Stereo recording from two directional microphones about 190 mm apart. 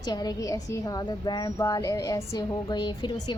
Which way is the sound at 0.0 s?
20° left (ahead or behind).